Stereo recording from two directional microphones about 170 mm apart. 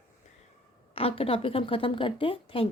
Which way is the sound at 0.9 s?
35° left (ahead or behind).